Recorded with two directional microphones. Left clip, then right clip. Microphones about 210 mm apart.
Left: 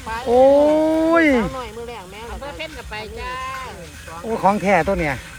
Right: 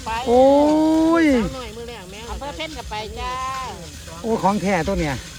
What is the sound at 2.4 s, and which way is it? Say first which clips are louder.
Speech: right 3 dB; 25° right (ahead or behind).